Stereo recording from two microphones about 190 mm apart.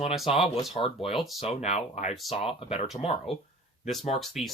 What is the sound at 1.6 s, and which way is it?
Speech, 35° left (ahead or behind).